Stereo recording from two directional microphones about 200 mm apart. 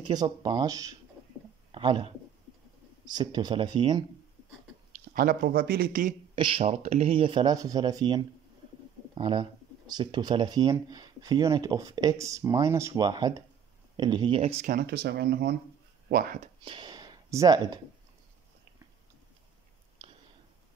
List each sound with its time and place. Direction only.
0.0 s speech: 20° right (ahead or behind)
5.1 s speech: 45° right (ahead or behind)
6.3 s speech: 25° right (ahead or behind)
14.7 s speech: 50° right (ahead or behind)
16.6 s speech: 25° right (ahead or behind)
20.0 s a sound: 25° right (ahead or behind)